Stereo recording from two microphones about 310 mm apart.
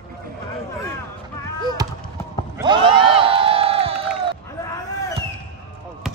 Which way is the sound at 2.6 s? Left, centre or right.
Centre.